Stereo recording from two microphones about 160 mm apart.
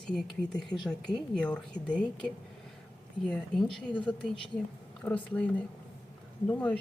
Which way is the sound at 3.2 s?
5° left (ahead or behind).